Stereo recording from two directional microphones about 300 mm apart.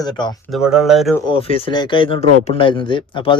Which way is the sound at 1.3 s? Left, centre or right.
Centre.